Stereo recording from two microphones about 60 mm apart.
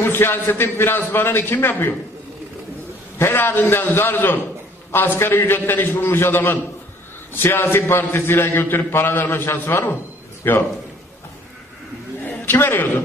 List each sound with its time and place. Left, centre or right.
0.0 s a man's voice: left
3.2 s a man's voice: left
12.3 s a man's voice: left